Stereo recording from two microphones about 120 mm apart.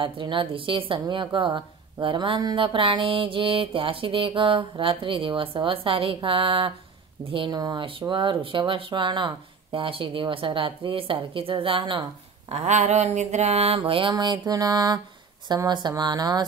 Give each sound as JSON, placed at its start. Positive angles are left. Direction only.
{"t": 0.0, "sound": "a woman's voice", "side_deg": -45}
{"t": 12.4, "sound": "a sound", "side_deg": -75}
{"t": 13.7, "sound": "a woman's voice", "side_deg": -45}